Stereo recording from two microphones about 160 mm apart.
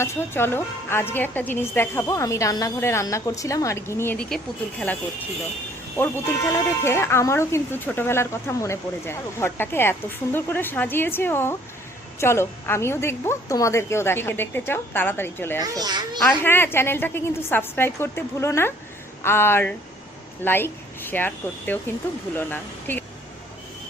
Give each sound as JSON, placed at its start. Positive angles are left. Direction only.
{"t": 0.0, "sound": "a woman's voice", "side_deg": 15}
{"t": 6.0, "sound": "a woman's voice", "side_deg": 15}
{"t": 15.6, "sound": "a child's voice", "side_deg": -25}
{"t": 16.4, "sound": "a woman's voice", "side_deg": 15}